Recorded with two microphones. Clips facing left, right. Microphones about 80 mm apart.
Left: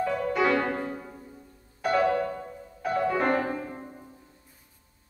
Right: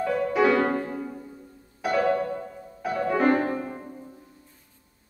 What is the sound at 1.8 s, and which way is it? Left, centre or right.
Music, centre.